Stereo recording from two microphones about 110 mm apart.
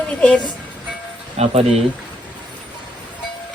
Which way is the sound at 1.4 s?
70° right (ahead or behind).